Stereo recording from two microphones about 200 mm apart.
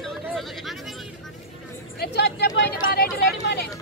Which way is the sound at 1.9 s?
55° left (ahead or behind).